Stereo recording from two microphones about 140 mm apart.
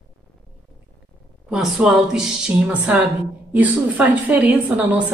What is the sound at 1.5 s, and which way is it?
A woman's voice, 5° right (ahead or behind).